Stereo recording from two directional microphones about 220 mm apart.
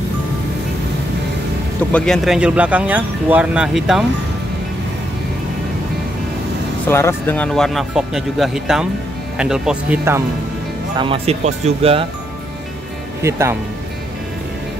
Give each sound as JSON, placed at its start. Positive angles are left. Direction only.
{"t": 1.9, "sound": "speech", "side_deg": 5}
{"t": 6.9, "sound": "speech", "side_deg": 10}
{"t": 11.0, "sound": "speech", "side_deg": -25}
{"t": 13.2, "sound": "speech", "side_deg": -10}